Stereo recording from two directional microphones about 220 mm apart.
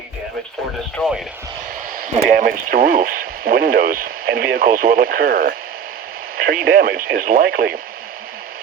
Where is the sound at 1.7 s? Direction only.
40° right (ahead or behind).